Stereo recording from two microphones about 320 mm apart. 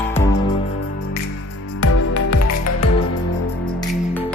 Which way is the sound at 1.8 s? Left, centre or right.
Left.